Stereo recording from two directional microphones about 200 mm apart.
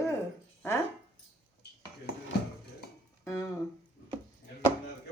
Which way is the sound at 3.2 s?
15° left (ahead or behind).